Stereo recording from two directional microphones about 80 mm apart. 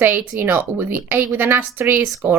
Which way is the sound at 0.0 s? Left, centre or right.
Right.